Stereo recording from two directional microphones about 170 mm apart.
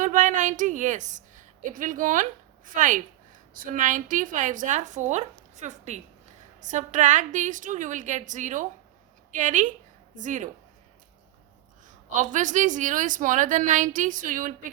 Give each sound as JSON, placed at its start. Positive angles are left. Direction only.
{"t": 0.0, "sound": "a woman's voice", "side_deg": -50}
{"t": 11.9, "sound": "a woman's voice", "side_deg": -50}